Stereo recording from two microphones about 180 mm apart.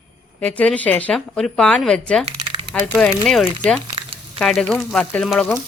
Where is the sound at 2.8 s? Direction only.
5° left (ahead or behind).